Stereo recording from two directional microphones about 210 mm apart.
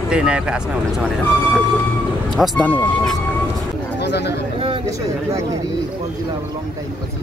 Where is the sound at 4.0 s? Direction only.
55° left (ahead or behind).